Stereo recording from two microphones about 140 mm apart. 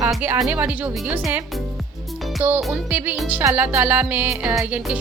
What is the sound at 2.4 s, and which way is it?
A woman's voice, 15° right (ahead or behind).